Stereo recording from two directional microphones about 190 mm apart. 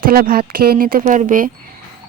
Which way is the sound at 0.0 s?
50° right (ahead or behind).